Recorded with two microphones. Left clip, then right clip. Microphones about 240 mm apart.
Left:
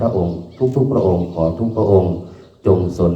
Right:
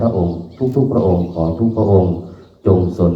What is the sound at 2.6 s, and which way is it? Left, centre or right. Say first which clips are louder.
Speech: right 1 dB; left.